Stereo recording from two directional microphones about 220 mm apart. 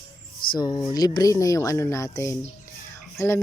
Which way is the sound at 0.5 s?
20° left (ahead or behind).